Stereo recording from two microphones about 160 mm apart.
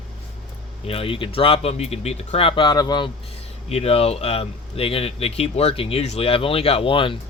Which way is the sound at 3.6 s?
40° left (ahead or behind).